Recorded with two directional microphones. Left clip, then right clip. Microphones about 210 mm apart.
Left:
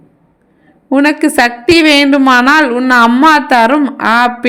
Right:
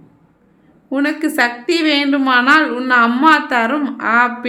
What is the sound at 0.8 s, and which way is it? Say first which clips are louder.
A woman's voice: left 8 dB; 35° left (ahead or behind).